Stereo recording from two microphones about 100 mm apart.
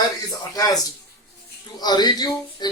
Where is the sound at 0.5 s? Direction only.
40° left (ahead or behind).